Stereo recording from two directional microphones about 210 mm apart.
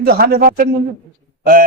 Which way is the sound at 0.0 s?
45° right (ahead or behind).